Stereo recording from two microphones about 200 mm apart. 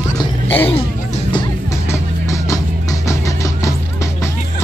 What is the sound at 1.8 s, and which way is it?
Music, 15° left (ahead or behind).